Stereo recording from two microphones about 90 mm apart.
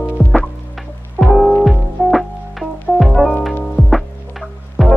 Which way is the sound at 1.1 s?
5° left (ahead or behind).